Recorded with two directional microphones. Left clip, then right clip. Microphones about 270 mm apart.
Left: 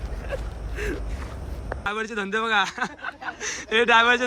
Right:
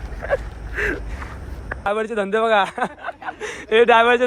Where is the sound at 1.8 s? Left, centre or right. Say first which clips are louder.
Right 7 dB; centre.